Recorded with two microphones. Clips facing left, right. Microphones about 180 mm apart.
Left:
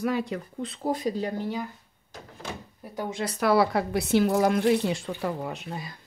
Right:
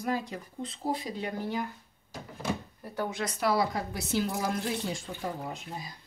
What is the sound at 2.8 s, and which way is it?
Speech, 15° left (ahead or behind).